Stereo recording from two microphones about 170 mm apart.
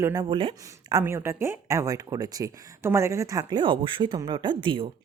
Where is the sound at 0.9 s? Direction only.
15° right (ahead or behind); by 4.8 s 30° right (ahead or behind).